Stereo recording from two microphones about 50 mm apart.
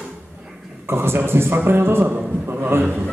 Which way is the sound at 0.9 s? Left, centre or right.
Right.